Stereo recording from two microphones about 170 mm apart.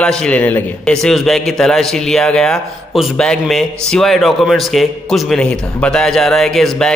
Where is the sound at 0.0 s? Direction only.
5° left (ahead or behind).